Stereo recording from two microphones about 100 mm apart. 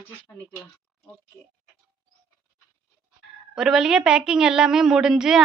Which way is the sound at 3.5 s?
5° right (ahead or behind).